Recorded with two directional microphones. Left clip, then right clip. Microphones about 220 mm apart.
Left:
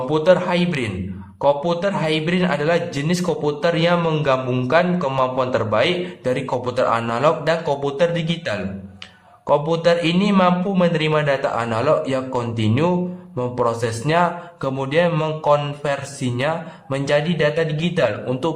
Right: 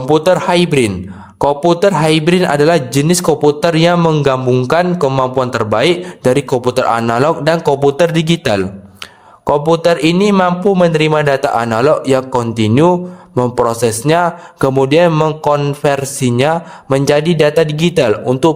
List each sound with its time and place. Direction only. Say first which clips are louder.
0.1 s a man's voice: right 6 dB; 50° right (ahead or behind)